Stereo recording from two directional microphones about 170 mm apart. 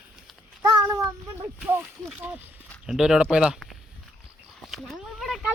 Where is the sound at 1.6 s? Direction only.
10° right (ahead or behind).